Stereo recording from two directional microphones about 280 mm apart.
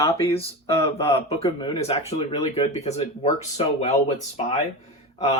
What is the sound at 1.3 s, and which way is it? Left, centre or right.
Speech, centre.